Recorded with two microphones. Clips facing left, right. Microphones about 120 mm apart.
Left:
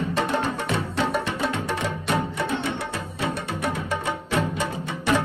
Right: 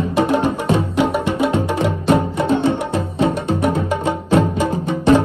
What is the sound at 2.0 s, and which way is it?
Music, 30° right (ahead or behind).